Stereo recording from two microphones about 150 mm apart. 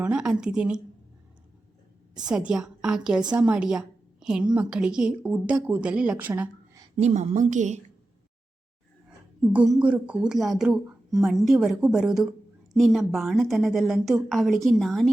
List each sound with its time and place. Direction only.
0.0 s a woman's voice: 5° right (ahead or behind)
2.1 s a woman's voice: 5° right (ahead or behind)
6.9 s a woman's voice: 45° right (ahead or behind)
9.5 s a woman's voice: 10° right (ahead or behind)